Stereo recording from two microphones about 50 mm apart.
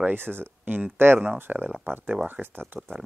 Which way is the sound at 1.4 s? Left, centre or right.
Right.